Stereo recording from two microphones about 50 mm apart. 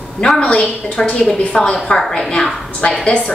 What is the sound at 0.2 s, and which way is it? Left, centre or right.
A woman's voice, left.